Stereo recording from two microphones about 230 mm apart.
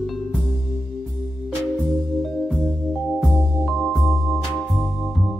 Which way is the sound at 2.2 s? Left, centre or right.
Centre.